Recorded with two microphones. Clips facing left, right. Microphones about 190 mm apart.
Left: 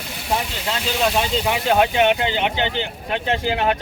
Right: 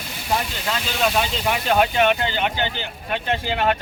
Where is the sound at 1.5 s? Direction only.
20° left (ahead or behind).